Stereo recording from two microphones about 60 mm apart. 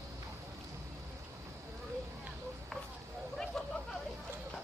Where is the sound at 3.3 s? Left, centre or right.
Centre.